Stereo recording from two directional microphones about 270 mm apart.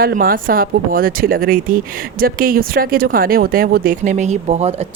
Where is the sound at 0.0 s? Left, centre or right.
Right.